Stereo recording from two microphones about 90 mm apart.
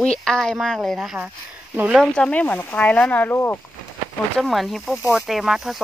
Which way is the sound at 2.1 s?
10° left (ahead or behind).